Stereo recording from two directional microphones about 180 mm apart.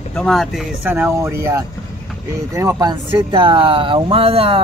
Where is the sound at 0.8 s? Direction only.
10° right (ahead or behind).